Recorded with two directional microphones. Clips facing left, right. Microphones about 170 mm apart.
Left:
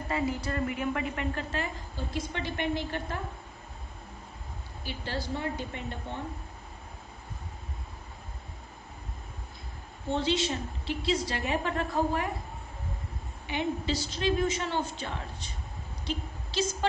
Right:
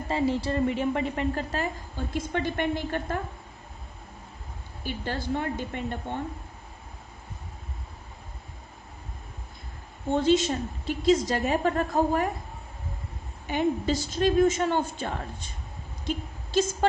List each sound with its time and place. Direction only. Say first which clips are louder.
0.1 s a woman's voice: right 5 dB; 30° right (ahead or behind)
2.1 s a woman's voice: right 6 dB; 50° right (ahead or behind)
4.8 s a woman's voice: right 4 dB; 55° right (ahead or behind)
10.1 s a woman's voice: right 6 dB; 45° right (ahead or behind)
13.5 s a woman's voice: right 5 dB; 45° right (ahead or behind)
16.5 s a woman's voice: right 6 dB; 50° right (ahead or behind)